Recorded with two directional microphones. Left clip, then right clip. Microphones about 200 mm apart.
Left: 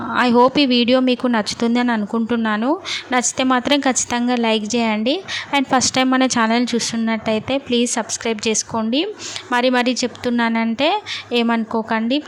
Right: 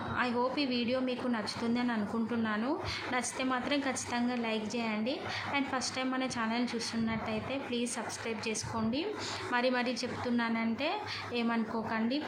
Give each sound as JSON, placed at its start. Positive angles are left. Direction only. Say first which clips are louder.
{"t": 0.1, "sound": "speech", "louder": "left 18 dB", "side_deg": 55}